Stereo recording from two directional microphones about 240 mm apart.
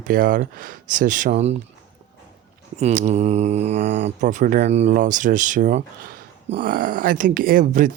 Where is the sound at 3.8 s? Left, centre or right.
Right.